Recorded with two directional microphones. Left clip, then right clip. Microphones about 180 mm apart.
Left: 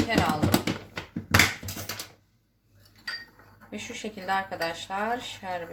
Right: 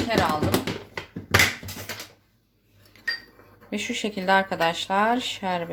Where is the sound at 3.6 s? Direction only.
55° right (ahead or behind).